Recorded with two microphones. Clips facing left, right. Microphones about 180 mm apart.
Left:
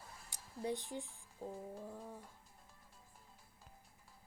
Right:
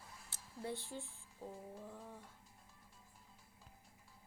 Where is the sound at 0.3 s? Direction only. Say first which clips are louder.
Left 4 dB; 15° left (ahead or behind).